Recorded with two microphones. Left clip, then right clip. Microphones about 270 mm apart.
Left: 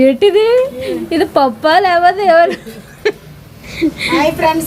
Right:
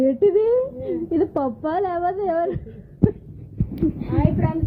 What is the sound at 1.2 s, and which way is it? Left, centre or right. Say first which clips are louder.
A woman's voice: left 13 dB; left.